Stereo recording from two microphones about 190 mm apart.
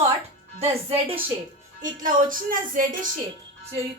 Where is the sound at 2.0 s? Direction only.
45° right (ahead or behind).